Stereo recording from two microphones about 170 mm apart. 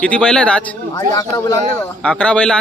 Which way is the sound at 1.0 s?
25° left (ahead or behind).